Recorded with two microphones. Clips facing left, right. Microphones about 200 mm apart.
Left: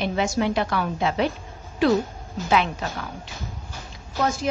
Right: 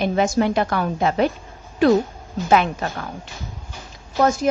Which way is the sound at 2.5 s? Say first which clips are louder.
Right 4 dB; 50° right (ahead or behind).